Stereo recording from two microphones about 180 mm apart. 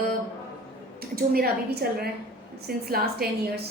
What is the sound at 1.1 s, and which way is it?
A woman's voice, 55° right (ahead or behind).